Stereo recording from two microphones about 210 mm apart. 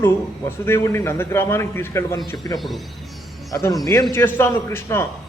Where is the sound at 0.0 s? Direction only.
10° left (ahead or behind).